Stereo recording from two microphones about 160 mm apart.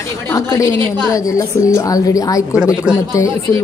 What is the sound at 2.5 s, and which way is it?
Speech, 5° right (ahead or behind).